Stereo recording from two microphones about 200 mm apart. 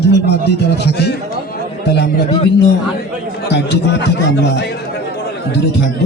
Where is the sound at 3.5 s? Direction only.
60° left (ahead or behind).